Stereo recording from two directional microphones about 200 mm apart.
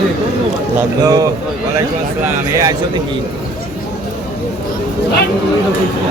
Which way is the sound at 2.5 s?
15° right (ahead or behind).